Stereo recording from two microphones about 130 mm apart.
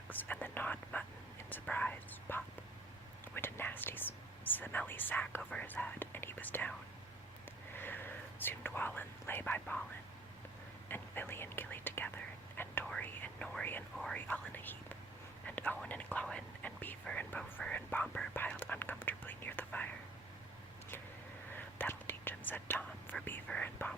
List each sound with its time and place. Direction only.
0.1 s speech: 15° left (ahead or behind)
7.8 s speech: 15° left (ahead or behind)
10.8 s speech: 15° left (ahead or behind)
12.9 s whispering: 10° left (ahead or behind)
21.8 s whispering: 15° left (ahead or behind)